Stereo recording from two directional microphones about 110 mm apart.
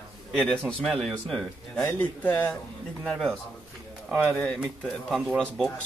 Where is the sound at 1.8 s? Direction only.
15° left (ahead or behind).